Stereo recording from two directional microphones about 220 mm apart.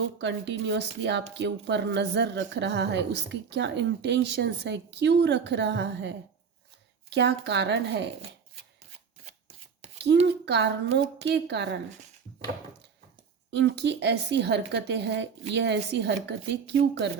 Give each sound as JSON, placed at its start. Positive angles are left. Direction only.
{"t": 0.2, "sound": "speech", "side_deg": -55}
{"t": 10.4, "sound": "speech", "side_deg": -50}
{"t": 13.5, "sound": "speech", "side_deg": -50}